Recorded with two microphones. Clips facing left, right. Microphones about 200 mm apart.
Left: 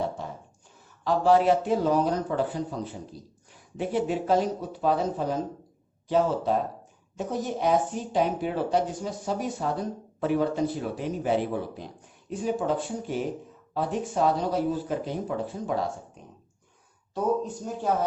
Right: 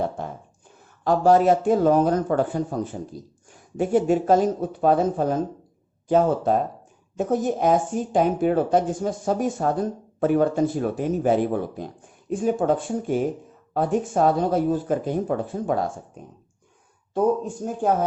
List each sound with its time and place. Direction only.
0.2 s beatboxing: 55° right (ahead or behind)
1.0 s a woman's voice: 45° right (ahead or behind)
17.2 s a woman's voice: 50° right (ahead or behind)